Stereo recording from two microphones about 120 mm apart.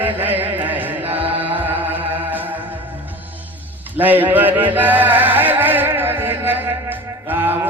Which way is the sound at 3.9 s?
15° right (ahead or behind).